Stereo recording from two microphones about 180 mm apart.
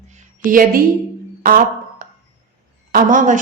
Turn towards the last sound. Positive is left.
turn(degrees=-45)  # may be behind; listen again after turning